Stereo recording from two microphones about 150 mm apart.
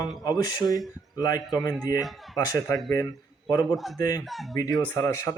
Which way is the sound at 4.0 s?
25° left (ahead or behind).